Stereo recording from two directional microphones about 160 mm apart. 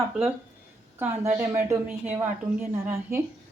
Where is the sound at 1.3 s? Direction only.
15° right (ahead or behind).